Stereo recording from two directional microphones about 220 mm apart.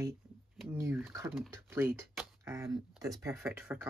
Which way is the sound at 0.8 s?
10° right (ahead or behind).